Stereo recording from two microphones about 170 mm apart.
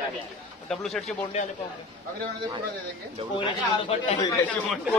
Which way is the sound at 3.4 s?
35° left (ahead or behind).